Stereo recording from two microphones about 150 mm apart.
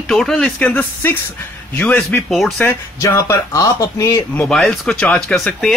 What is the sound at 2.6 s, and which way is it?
Speech, 20° left (ahead or behind).